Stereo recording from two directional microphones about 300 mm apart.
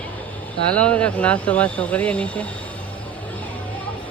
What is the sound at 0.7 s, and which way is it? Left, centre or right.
Speech, centre.